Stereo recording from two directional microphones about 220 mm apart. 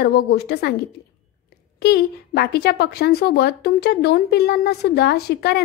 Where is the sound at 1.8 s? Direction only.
45° left (ahead or behind).